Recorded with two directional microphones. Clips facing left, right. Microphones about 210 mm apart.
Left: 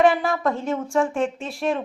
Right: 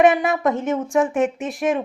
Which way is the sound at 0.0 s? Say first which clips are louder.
Right 3 dB; 20° right (ahead or behind).